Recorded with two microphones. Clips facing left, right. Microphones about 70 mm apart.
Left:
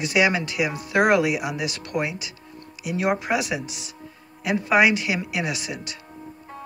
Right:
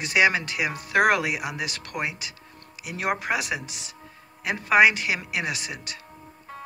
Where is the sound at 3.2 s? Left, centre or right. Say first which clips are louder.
Left 3 dB; right.